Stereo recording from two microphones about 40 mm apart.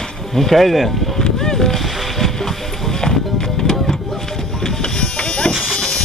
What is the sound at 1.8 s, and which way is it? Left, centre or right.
Boat, centre.